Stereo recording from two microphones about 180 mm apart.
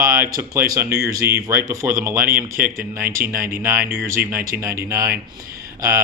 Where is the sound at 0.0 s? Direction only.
15° right (ahead or behind).